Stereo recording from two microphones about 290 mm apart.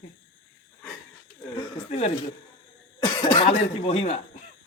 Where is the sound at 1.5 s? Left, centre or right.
Left.